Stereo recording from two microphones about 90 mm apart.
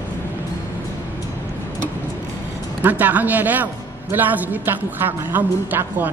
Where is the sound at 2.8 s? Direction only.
20° right (ahead or behind).